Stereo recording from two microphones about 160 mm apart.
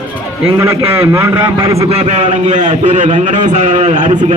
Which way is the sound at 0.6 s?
15° right (ahead or behind).